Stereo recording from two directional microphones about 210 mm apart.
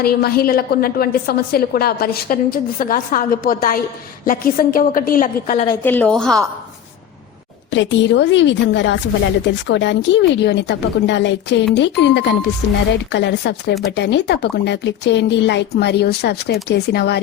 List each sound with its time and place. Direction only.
0.0 s a woman's voice: 45° left (ahead or behind)
5.8 s a woman's voice: 10° left (ahead or behind)
7.7 s a woman's voice: 60° left (ahead or behind)